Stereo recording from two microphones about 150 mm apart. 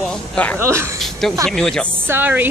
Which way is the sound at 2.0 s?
15° right (ahead or behind).